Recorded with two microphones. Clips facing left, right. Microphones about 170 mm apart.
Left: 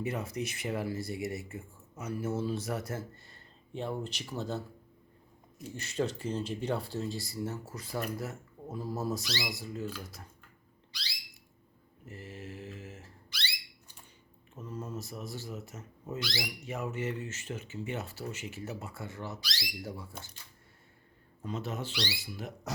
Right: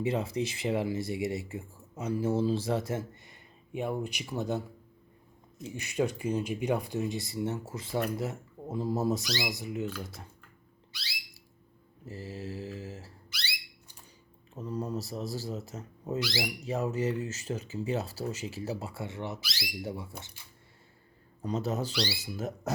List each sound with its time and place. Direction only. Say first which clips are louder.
0.0 s speech: right 5 dB; 30° right (ahead or behind)
5.7 s speech: right 3 dB; 10° right (ahead or behind)
9.2 s speech: right 4 dB; centre (ahead or behind)
9.6 s speech: right 4 dB; 20° right (ahead or behind)
12.0 s mantra: right 5 dB; 35° right (ahead or behind)
13.3 s a sound: even; 5° right (ahead or behind)
14.5 s speech: right 6 dB; 35° right (ahead or behind)
21.4 s speech: right 5 dB; 40° right (ahead or behind)